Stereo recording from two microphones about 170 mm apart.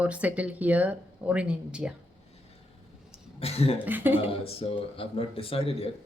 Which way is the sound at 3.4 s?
35° left (ahead or behind).